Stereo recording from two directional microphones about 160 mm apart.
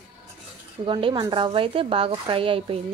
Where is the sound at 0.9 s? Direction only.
30° right (ahead or behind).